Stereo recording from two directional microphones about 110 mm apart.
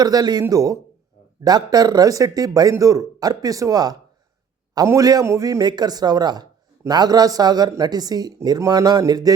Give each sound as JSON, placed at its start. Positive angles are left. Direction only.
{"t": 0.0, "sound": "speech", "side_deg": -35}